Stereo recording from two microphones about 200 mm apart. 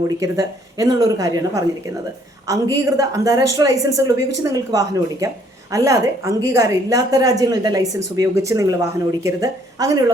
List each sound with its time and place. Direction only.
0.2 s a woman's voice: 15° right (ahead or behind)